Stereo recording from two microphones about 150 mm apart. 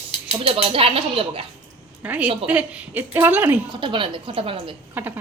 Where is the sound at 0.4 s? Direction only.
40° right (ahead or behind).